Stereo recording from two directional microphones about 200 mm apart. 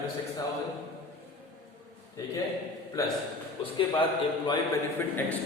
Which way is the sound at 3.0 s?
15° left (ahead or behind).